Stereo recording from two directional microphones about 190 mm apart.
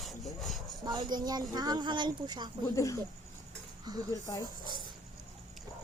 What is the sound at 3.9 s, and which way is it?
Speech, 20° right (ahead or behind).